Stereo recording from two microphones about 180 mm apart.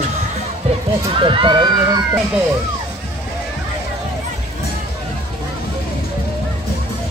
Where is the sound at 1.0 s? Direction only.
30° right (ahead or behind).